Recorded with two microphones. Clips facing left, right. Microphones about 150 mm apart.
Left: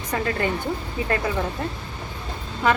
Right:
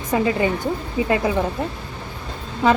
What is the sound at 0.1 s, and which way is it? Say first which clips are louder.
A woman's voice: right 5 dB; 15° right (ahead or behind).